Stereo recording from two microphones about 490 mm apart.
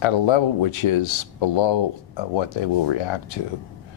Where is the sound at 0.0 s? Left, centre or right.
Left.